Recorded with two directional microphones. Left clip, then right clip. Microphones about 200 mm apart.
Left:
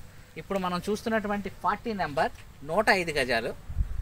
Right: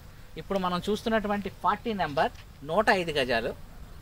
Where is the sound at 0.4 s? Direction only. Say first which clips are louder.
Right 1 dB; 10° left (ahead or behind).